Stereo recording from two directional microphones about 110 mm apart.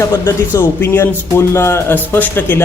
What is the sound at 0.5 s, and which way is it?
A man's voice, 20° left (ahead or behind).